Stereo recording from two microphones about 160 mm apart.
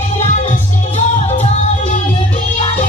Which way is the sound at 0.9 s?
40° left (ahead or behind).